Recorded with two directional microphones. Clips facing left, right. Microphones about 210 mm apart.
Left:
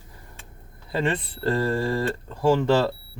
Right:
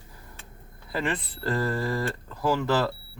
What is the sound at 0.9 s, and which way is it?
Speech, 25° left (ahead or behind).